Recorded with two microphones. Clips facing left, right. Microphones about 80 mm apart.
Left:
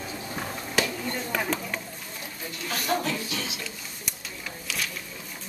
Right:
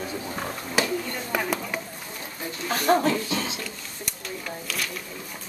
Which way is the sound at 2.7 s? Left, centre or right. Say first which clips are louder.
Right 7 dB; right.